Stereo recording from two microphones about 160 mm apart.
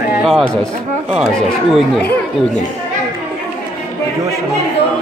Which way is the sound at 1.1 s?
5° right (ahead or behind).